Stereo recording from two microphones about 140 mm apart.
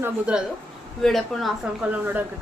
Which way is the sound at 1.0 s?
Centre (ahead or behind).